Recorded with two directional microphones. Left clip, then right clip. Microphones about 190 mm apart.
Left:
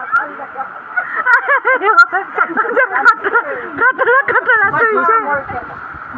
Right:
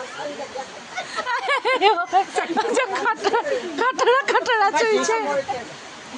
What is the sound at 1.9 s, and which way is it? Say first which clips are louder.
Speech: left 9 dB; 15° right (ahead or behind).